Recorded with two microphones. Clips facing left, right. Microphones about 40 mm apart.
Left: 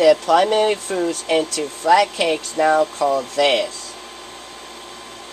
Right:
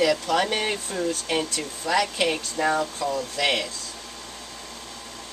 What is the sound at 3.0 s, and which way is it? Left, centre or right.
Speech, left.